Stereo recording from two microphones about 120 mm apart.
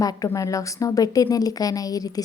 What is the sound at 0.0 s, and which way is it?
A woman's voice, 30° left (ahead or behind).